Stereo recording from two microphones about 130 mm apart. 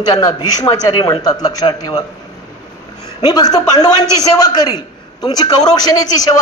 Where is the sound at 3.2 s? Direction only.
30° left (ahead or behind).